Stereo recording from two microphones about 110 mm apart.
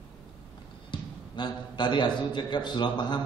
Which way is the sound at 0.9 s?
45° left (ahead or behind).